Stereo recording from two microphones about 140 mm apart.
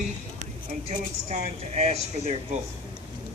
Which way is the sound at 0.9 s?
55° right (ahead or behind).